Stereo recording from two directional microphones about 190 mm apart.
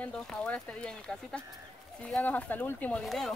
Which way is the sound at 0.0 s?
5° left (ahead or behind).